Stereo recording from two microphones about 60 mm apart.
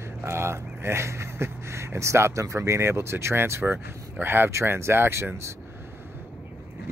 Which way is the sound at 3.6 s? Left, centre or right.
Right.